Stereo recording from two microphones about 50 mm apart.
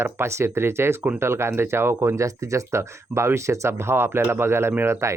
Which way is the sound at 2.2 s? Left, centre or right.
Right.